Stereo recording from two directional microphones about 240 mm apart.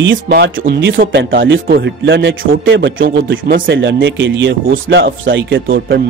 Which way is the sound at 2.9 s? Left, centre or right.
Right.